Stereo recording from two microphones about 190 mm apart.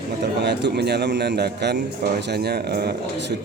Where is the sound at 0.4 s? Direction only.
60° right (ahead or behind).